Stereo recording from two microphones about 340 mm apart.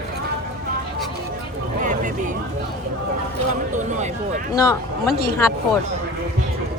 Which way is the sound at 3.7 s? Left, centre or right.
Right.